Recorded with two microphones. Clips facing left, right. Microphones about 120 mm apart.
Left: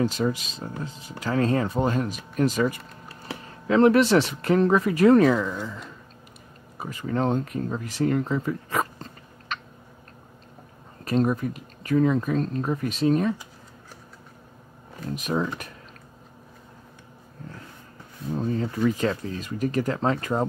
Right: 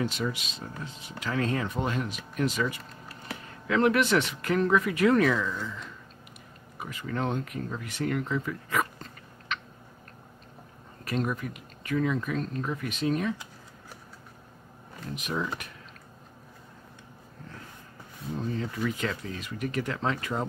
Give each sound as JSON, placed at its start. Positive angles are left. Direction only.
{"t": 0.0, "sound": "speech", "side_deg": 40}
{"t": 3.1, "sound": "speech", "side_deg": 30}
{"t": 6.8, "sound": "speech", "side_deg": 35}
{"t": 11.1, "sound": "speech", "side_deg": 35}
{"t": 15.1, "sound": "speech", "side_deg": 40}
{"t": 18.3, "sound": "speech", "side_deg": 40}